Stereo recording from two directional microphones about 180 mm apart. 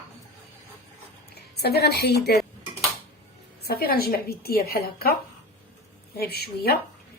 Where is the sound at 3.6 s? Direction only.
60° left (ahead or behind).